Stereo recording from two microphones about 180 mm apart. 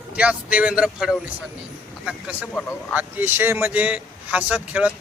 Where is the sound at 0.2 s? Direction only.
5° right (ahead or behind).